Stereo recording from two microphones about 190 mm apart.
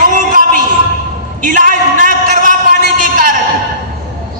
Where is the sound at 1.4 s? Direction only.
45° right (ahead or behind).